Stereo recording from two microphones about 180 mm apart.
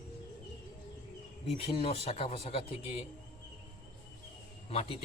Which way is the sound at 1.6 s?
30° left (ahead or behind).